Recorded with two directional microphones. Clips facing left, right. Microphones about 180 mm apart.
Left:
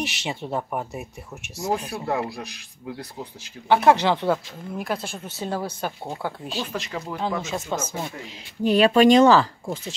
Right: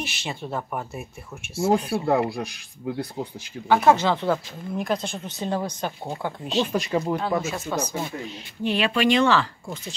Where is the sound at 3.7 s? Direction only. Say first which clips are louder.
Left 1 dB; 10° left (ahead or behind).